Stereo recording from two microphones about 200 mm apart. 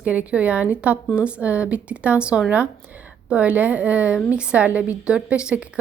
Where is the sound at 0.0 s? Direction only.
5° right (ahead or behind).